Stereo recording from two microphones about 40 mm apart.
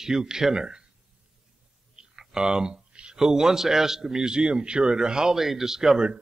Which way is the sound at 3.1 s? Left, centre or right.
Centre.